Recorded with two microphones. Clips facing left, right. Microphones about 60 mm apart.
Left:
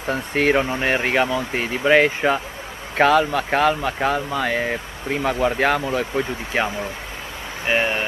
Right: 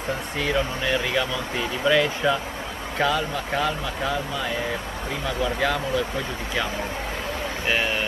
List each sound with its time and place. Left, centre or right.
0.1 s speech: left
3.0 s speech: left
7.6 s speech: left